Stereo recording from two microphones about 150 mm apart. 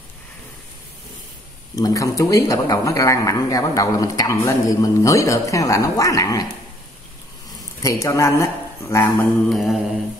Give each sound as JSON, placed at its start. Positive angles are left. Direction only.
{"t": 1.8, "sound": "speech", "side_deg": 25}
{"t": 7.8, "sound": "speech", "side_deg": 20}
{"t": 9.5, "sound": "mantra", "side_deg": 0}